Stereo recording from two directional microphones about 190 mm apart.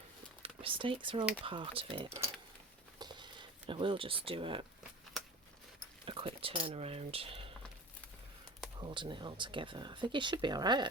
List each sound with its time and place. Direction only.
0.4 s speech: 30° right (ahead or behind)
3.0 s a sound: 25° right (ahead or behind)
6.1 s speech: 30° right (ahead or behind)
8.8 s speech: 25° right (ahead or behind)